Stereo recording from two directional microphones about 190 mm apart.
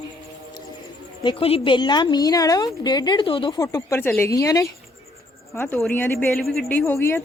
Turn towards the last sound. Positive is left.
turn(degrees=15)  # may be behind; listen again after turning